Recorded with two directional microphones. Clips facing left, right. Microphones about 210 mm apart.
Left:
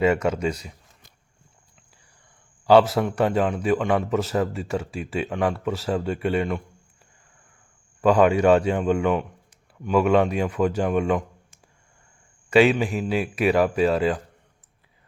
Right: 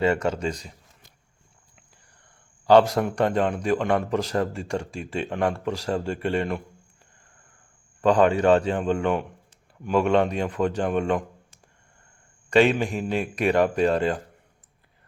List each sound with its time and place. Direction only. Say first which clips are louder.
0.0 s a man's voice: left 2 dB; 10° left (ahead or behind)
2.6 s speech: left 1 dB; 5° left (ahead or behind)
8.0 s a man's voice: left 1 dB; 10° left (ahead or behind)
12.5 s a man's voice: left 2 dB; 5° left (ahead or behind)